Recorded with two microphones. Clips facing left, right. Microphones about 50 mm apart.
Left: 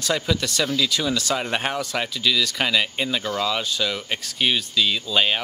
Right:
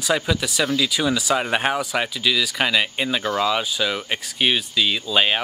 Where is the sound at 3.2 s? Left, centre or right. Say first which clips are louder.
Right 3 dB; right.